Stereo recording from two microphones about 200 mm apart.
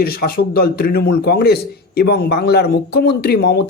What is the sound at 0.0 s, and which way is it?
A man's voice, 50° left (ahead or behind).